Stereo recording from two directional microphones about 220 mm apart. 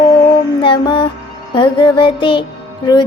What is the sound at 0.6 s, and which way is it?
Music, 20° left (ahead or behind).